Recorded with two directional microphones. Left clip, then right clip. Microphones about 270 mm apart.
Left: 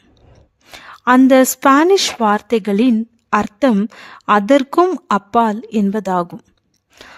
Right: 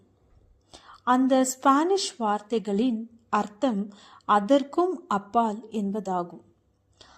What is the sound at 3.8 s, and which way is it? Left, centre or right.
Speech, left.